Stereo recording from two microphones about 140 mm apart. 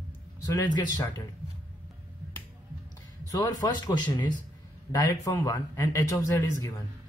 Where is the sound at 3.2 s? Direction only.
25° left (ahead or behind).